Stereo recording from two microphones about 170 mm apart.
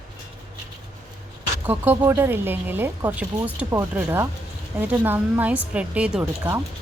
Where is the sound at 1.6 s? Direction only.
10° right (ahead or behind).